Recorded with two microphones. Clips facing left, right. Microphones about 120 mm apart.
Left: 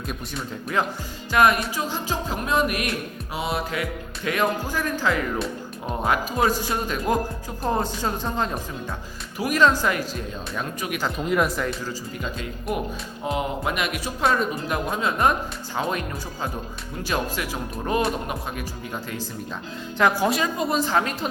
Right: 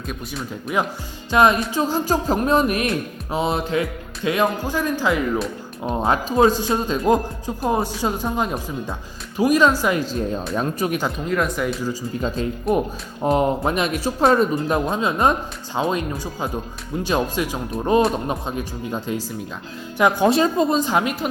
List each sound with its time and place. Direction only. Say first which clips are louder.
0.7 s speech: right 2 dB; 15° right (ahead or behind)
1.7 s music: right 7 dB; 35° right (ahead or behind)
3.3 s speech: right 6 dB; 30° right (ahead or behind)
10.2 s music: right 8 dB; 35° right (ahead or behind)
11.3 s speech: left 1 dB; 5° left (ahead or behind)
12.1 s music: right 7 dB; 30° right (ahead or behind)
13.2 s speech: right 7 dB; 40° right (ahead or behind); by 21.2 s 15° right (ahead or behind)